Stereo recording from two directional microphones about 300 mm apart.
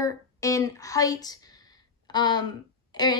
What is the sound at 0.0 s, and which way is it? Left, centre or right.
A woman's voice, centre.